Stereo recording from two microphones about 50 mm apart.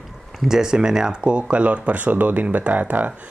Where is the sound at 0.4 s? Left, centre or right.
Centre.